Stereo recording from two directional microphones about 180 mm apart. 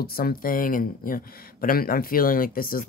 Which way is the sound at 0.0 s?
55° left (ahead or behind).